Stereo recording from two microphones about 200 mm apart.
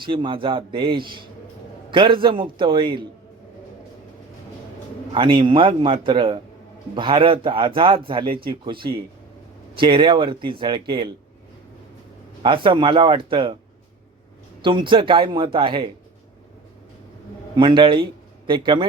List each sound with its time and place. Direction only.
0.0 s a man's voice: 25° right (ahead or behind)
5.1 s a man's voice: 25° right (ahead or behind)
12.4 s a man's voice: 25° right (ahead or behind)
14.6 s a man's voice: 25° right (ahead or behind)
17.6 s a man's voice: 25° right (ahead or behind)